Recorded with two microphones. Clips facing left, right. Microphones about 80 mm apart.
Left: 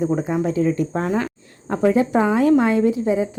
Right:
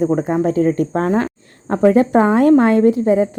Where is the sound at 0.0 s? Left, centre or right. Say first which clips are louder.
Right 4 dB; right.